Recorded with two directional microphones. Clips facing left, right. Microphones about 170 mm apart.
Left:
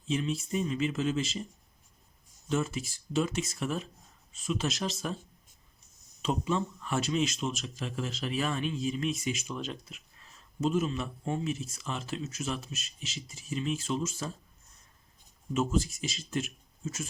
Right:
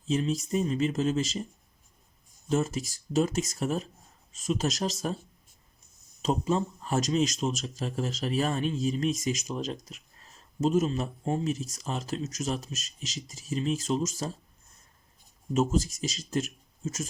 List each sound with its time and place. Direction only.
0.1 s speech: 40° right (ahead or behind)
2.5 s speech: 40° right (ahead or behind)
6.2 s speech: 40° right (ahead or behind)
15.5 s speech: 40° right (ahead or behind)